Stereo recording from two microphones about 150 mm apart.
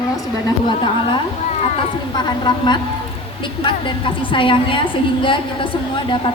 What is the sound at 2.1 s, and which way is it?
A woman's voice, 30° left (ahead or behind).